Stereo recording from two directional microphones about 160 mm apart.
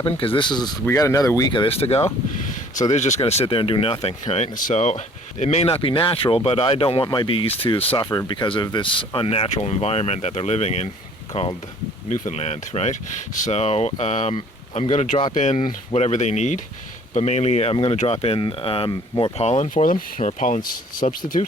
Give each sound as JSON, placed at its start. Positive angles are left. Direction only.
{"t": 0.0, "sound": "speech", "side_deg": 35}
{"t": 19.4, "sound": "speech", "side_deg": 45}